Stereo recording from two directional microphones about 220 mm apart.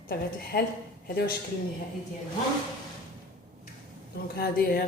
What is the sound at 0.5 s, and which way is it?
Speech, 40° left (ahead or behind).